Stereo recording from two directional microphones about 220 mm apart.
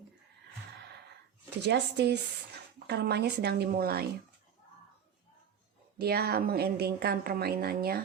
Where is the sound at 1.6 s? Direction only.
50° right (ahead or behind).